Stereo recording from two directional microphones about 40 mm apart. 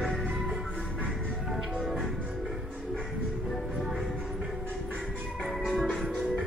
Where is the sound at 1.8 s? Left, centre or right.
Centre.